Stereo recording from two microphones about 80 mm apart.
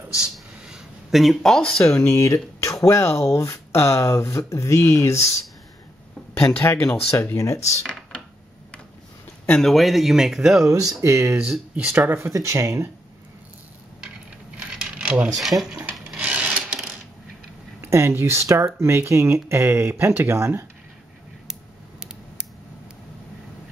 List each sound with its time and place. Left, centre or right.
0.2 s a sound: centre
2.0 s speech: left
6.6 s speech: left
9.5 s speech: centre
10.6 s speech: right
11.7 s speech: right
12.2 s speech: right
14.6 s coin: centre
15.3 s speech: centre
16.2 s a sound: centre
17.7 s speech: right